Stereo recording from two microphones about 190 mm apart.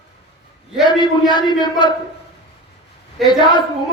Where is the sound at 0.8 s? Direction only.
25° left (ahead or behind).